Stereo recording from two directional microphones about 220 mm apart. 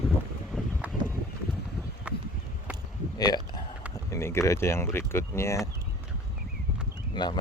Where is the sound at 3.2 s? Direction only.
20° left (ahead or behind).